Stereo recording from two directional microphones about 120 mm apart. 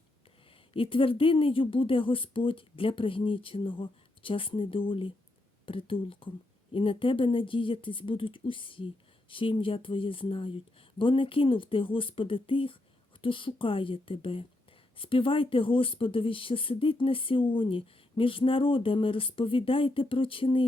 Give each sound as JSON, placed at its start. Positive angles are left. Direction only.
{"t": 0.7, "sound": "speech", "side_deg": 50}